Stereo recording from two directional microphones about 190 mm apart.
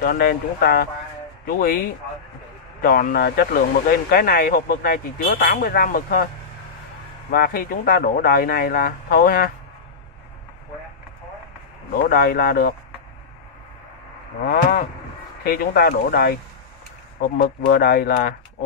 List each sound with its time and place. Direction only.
0.0 s a man's voice: 50° left (ahead or behind)
2.8 s a man's voice: 50° left (ahead or behind)
7.2 s a man's voice: 50° left (ahead or behind)
11.9 s a man's voice: 50° left (ahead or behind)
14.4 s vehicle: 55° left (ahead or behind)
15.4 s a man's voice: 50° left (ahead or behind)
17.4 s a man's voice: 50° left (ahead or behind)